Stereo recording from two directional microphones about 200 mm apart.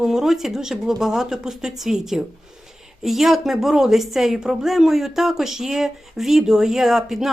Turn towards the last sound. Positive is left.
turn(degrees=0)  # may be behind; listen again after turning